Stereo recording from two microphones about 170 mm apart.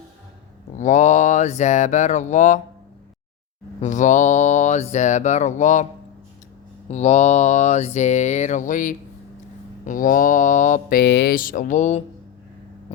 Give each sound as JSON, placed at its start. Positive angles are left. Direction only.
{"t": 0.8, "sound": "speech", "side_deg": 45}
{"t": 3.8, "sound": "speech", "side_deg": 45}
{"t": 6.9, "sound": "speech", "side_deg": 40}
{"t": 11.0, "sound": "speech", "side_deg": 90}